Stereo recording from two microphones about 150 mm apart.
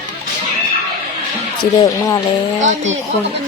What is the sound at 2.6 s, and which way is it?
Speech, 55° right (ahead or behind).